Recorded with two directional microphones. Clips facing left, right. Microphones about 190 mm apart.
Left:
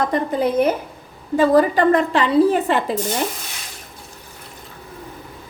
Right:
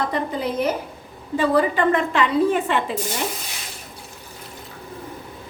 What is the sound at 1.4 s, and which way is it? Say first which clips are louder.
A woman's voice: left 4 dB; 40° left (ahead or behind).